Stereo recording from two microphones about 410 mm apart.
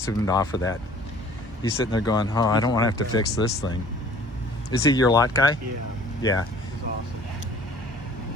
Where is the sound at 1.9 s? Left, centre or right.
Centre.